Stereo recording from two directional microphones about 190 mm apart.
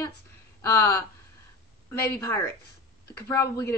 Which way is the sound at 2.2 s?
15° left (ahead or behind).